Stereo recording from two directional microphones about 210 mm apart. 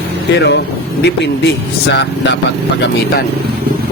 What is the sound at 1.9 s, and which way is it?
Speech, 55° left (ahead or behind).